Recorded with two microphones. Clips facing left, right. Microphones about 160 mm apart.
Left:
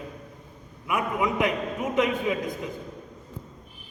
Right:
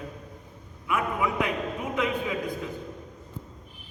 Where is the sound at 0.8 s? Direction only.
15° left (ahead or behind).